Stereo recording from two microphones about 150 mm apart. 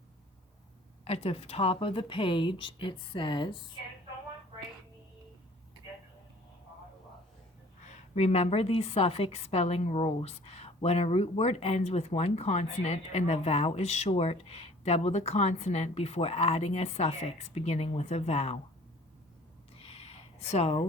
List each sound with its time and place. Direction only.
1.0 s speech: 40° left (ahead or behind)
7.9 s a woman's voice: 45° left (ahead or behind)
19.8 s a sound: 40° left (ahead or behind)